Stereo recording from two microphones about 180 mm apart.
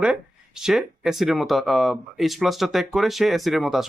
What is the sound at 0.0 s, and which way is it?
Speech, 5° right (ahead or behind).